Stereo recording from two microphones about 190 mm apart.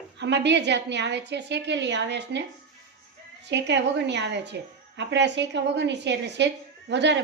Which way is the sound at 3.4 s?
65° right (ahead or behind).